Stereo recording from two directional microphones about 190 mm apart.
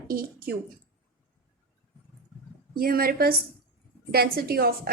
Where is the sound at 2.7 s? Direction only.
50° right (ahead or behind).